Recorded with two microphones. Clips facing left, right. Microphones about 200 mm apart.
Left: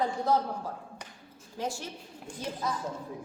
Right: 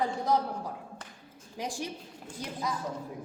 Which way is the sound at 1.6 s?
15° right (ahead or behind).